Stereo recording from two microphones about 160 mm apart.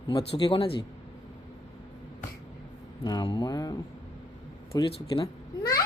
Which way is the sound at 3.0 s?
25° left (ahead or behind).